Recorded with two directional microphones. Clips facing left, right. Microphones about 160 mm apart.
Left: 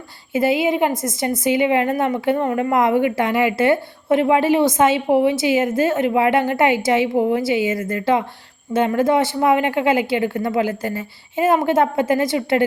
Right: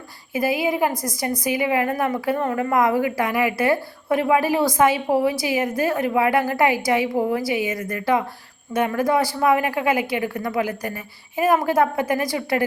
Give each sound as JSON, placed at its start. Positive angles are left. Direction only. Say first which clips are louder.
{"t": 0.3, "sound": "a woman's voice", "louder": "left 4 dB", "side_deg": 25}